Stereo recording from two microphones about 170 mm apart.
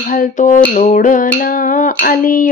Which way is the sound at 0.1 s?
50° left (ahead or behind).